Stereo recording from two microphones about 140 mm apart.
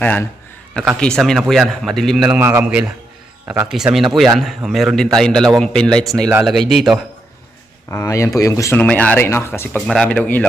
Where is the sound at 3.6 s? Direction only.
5° right (ahead or behind).